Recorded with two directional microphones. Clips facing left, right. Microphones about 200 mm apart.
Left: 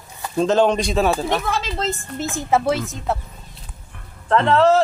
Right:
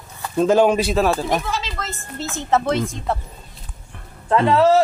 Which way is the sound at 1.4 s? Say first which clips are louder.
Left 2 dB; 55° left (ahead or behind).